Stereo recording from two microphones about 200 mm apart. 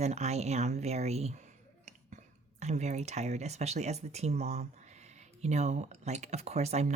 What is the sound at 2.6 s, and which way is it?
Speech, 35° right (ahead or behind).